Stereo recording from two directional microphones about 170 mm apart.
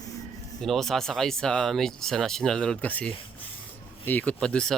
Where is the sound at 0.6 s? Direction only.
Centre (ahead or behind).